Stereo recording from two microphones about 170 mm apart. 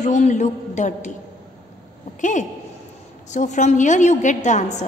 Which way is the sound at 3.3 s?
45° left (ahead or behind).